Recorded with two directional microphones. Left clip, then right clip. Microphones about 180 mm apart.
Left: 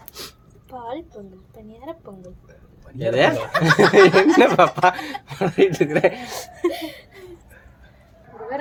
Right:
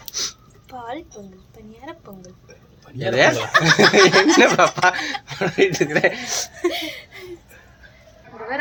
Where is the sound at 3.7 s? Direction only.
5° left (ahead or behind).